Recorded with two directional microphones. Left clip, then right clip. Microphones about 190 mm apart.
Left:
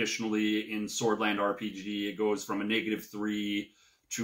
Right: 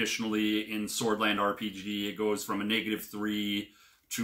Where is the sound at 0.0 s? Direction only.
15° right (ahead or behind).